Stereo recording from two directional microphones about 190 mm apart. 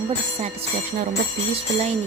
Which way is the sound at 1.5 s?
30° right (ahead or behind).